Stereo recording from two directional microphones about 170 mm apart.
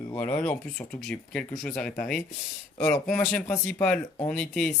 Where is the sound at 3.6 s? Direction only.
5° left (ahead or behind).